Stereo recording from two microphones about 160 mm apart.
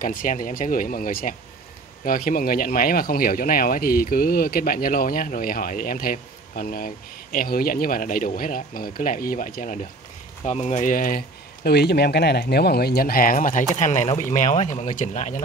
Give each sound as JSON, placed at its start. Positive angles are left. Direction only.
{"t": 0.0, "sound": "speech", "side_deg": 60}
{"t": 10.4, "sound": "speech", "side_deg": 45}